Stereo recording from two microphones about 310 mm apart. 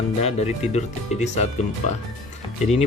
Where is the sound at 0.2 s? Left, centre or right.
Left.